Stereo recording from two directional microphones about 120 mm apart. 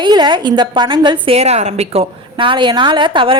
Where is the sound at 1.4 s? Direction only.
65° right (ahead or behind).